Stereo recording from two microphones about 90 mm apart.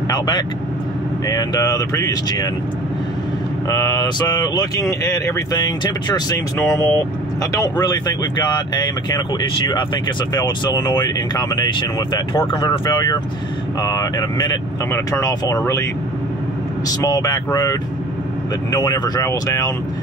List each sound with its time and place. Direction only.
1.2 s speech: 45° left (ahead or behind)
3.6 s speech: 40° left (ahead or behind)
5.6 s speech: 50° left (ahead or behind)
6.6 s speech: 35° left (ahead or behind)
12.4 s speech: 60° left (ahead or behind); by 15.6 s 45° left (ahead or behind)
17.0 s speech: 40° left (ahead or behind)